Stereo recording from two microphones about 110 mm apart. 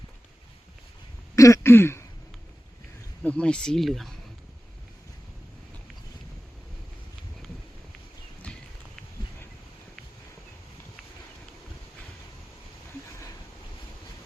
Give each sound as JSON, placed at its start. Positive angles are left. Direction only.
{"t": 1.4, "sound": "throat clearing", "side_deg": 30}
{"t": 3.2, "sound": "speech", "side_deg": 10}
{"t": 8.4, "sound": "clip-clop", "side_deg": 15}